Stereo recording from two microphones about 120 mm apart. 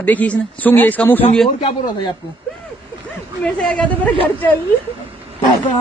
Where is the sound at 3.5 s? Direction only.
10° left (ahead or behind).